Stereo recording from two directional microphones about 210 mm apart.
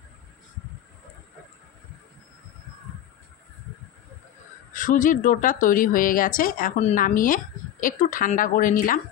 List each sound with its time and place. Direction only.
4.7 s speech: 40° left (ahead or behind)